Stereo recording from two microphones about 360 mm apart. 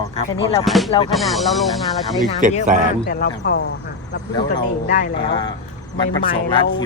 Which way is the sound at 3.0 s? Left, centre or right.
Left.